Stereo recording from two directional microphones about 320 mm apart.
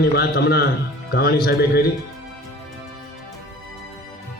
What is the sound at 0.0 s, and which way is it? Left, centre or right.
A man's voice, left.